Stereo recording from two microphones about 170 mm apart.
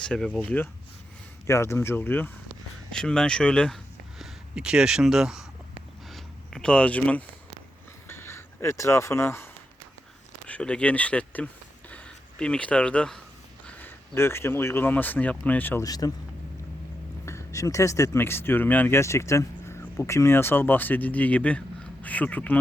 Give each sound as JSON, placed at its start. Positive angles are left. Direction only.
{"t": 0.0, "sound": "speech", "side_deg": 5}
{"t": 6.1, "sound": "a sound", "side_deg": 0}
{"t": 10.4, "sound": "speech", "side_deg": 5}
{"t": 11.9, "sound": "a sound", "side_deg": 5}
{"t": 13.7, "sound": "speech", "side_deg": 10}
{"t": 17.2, "sound": "speech", "side_deg": 15}